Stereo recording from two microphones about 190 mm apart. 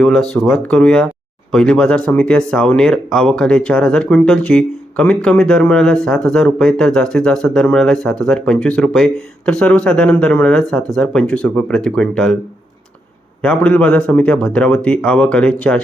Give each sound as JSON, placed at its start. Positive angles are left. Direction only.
{"t": 0.0, "sound": "speech", "side_deg": 0}
{"t": 13.4, "sound": "speech", "side_deg": 5}